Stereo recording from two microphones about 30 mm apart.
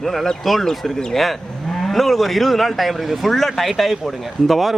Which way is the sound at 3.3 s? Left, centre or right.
Centre.